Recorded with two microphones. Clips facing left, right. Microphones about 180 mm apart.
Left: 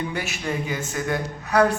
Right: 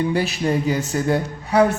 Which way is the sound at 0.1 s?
35° right (ahead or behind).